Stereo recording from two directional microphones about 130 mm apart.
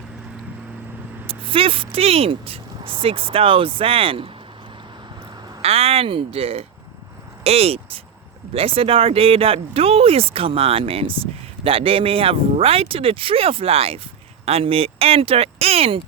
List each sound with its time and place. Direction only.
1.3 s speech: 45° right (ahead or behind)
5.6 s speech: 50° right (ahead or behind)